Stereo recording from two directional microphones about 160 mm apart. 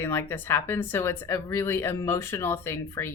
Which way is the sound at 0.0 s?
15° left (ahead or behind).